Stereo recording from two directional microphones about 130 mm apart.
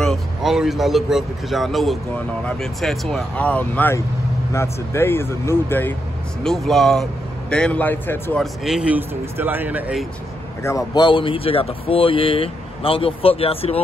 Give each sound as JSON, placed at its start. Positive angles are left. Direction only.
{"t": 0.0, "sound": "a man's voice", "side_deg": 0}
{"t": 6.4, "sound": "speech", "side_deg": 0}
{"t": 8.6, "sound": "speech", "side_deg": -5}
{"t": 10.6, "sound": "a man's voice", "side_deg": 20}
{"t": 11.0, "sound": "speech", "side_deg": 40}